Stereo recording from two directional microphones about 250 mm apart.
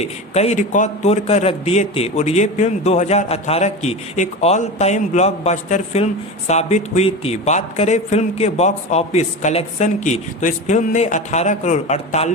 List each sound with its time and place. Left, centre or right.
0.0 s speech: left